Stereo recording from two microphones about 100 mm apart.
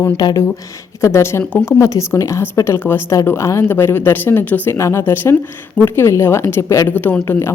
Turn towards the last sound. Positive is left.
turn(degrees=20)  # may be behind; listen again after turning